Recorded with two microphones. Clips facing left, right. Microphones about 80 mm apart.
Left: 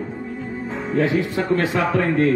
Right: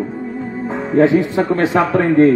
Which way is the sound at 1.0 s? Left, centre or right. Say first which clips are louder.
Right 8 dB; right.